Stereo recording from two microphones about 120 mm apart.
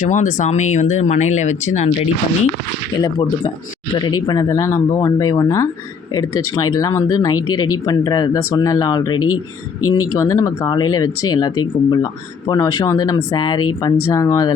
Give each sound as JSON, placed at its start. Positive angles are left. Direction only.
{"t": 0.0, "sound": "speech", "side_deg": 90}
{"t": 3.9, "sound": "speech", "side_deg": 35}